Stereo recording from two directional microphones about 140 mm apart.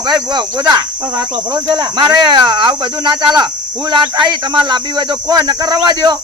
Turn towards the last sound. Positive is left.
turn(degrees=-30)  # may be behind; listen again after turning